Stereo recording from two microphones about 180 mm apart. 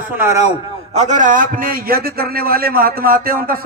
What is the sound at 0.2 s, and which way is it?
Speech, 15° right (ahead or behind).